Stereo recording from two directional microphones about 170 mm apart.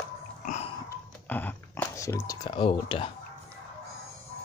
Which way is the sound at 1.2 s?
10° left (ahead or behind).